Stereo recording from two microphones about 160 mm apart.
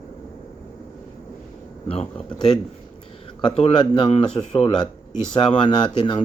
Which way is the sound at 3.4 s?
35° left (ahead or behind).